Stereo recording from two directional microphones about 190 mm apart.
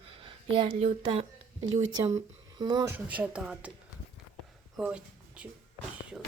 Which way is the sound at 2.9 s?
10° right (ahead or behind).